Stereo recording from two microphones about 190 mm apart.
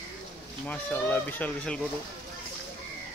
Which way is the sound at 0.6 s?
10° left (ahead or behind).